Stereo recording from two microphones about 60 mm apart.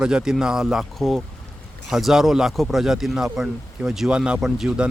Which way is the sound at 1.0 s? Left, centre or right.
Centre.